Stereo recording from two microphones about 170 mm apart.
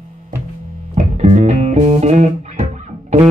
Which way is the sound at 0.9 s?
40° right (ahead or behind).